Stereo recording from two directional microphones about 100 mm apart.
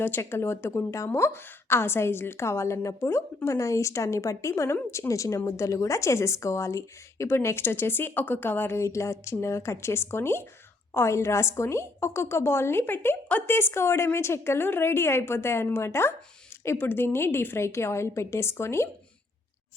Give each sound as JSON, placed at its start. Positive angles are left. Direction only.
{"t": 0.0, "sound": "a woman's voice", "side_deg": 20}